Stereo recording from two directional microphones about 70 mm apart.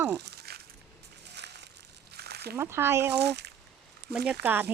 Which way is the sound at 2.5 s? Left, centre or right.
Right.